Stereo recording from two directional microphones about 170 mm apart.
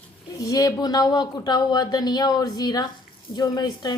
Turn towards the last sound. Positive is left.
turn(degrees=25)  # may be behind; listen again after turning